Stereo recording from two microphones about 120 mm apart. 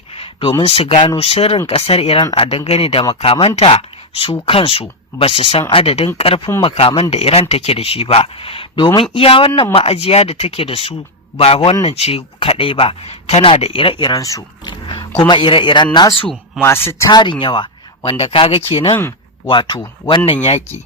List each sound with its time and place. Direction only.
0.1 s a sound: 50° left (ahead or behind)
0.6 s speech: 55° left (ahead or behind)
1.3 s a man's voice: 60° left (ahead or behind); by 16.1 s 35° left (ahead or behind)
16.6 s speech: 20° left (ahead or behind)
17.1 s a man's voice: 40° left (ahead or behind)
17.4 s a sound: 40° left (ahead or behind)
18.1 s speech: 55° left (ahead or behind)
19.5 s speech: 40° left (ahead or behind)